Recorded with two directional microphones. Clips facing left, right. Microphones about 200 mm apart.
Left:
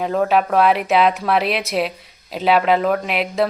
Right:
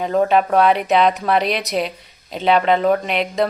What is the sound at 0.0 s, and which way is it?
Speech, centre (ahead or behind).